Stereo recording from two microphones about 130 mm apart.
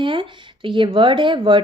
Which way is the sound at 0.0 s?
40° right (ahead or behind).